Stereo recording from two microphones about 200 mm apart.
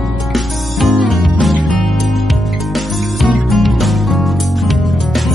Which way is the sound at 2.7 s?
Centre (ahead or behind).